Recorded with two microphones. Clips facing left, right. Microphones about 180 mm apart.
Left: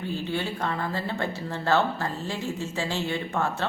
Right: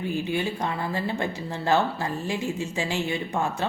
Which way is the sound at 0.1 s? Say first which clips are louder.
Right 2 dB; 15° right (ahead or behind).